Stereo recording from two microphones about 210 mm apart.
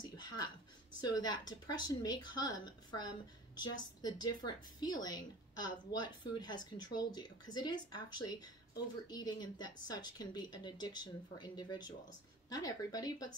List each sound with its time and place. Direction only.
1.0 s a woman's voice: 20° left (ahead or behind)